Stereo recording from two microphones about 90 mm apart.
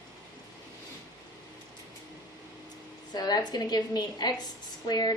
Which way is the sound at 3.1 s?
50° left (ahead or behind).